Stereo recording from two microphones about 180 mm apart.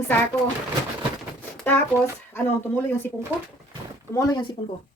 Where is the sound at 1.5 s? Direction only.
10° left (ahead or behind).